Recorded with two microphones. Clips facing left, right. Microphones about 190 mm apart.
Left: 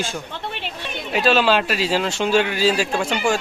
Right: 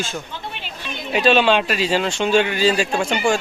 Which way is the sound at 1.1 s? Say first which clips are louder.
Right 2 dB; centre (ahead or behind).